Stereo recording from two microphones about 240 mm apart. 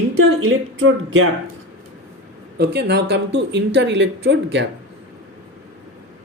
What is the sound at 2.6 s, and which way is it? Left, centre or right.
Speech, right.